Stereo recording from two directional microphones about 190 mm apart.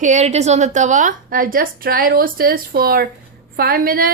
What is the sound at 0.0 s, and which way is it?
Speech, 35° right (ahead or behind).